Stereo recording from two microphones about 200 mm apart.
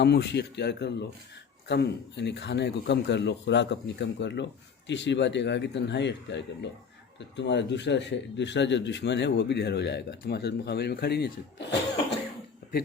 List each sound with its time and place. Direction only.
0.0 s a man's voice: 55° left (ahead or behind)